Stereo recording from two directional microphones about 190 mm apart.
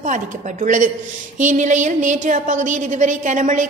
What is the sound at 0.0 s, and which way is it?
A woman's voice, 40° right (ahead or behind).